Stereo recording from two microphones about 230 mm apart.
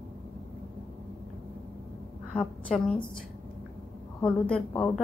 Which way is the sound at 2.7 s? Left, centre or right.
Centre.